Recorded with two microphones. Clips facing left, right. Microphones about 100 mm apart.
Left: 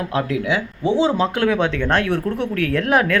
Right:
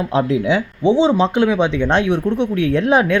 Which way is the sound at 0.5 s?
20° right (ahead or behind).